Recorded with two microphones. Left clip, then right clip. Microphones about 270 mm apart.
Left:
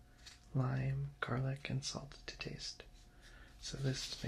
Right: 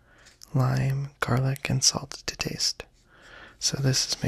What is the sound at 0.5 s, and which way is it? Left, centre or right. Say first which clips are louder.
Speech: right 13 dB; right.